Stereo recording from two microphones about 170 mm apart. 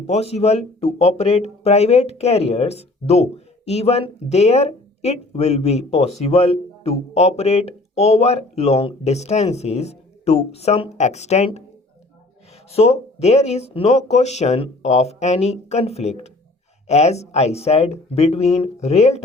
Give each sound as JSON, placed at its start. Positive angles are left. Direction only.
{"t": 0.1, "sound": "speech", "side_deg": 40}
{"t": 12.7, "sound": "speech", "side_deg": 40}